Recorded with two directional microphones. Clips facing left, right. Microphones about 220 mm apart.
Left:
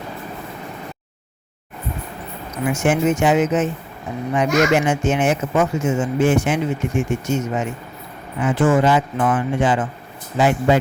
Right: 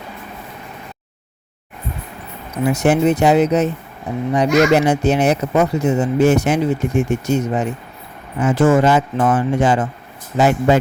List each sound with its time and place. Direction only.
2.6 s speech: 40° right (ahead or behind)